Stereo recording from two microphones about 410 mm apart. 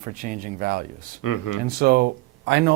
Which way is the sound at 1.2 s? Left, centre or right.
Left.